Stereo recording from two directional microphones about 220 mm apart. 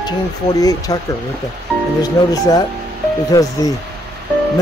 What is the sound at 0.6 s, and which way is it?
Speech, 15° left (ahead or behind).